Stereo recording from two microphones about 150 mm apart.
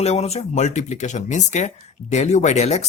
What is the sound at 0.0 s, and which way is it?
Speech, 45° left (ahead or behind).